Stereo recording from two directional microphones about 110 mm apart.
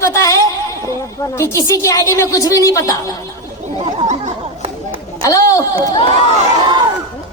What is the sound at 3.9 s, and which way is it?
Chatter, 75° right (ahead or behind).